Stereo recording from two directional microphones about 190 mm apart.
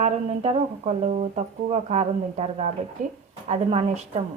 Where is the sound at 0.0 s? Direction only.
35° right (ahead or behind).